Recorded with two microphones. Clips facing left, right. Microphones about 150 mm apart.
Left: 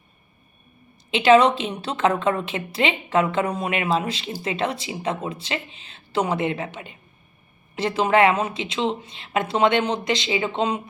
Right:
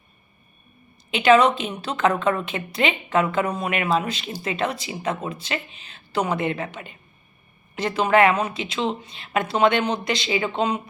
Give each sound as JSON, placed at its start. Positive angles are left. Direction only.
{"t": 1.1, "sound": "speech", "side_deg": 30}